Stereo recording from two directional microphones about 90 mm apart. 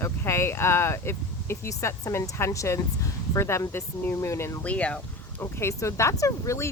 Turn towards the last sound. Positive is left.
turn(degrees=35)  # may be behind; listen again after turning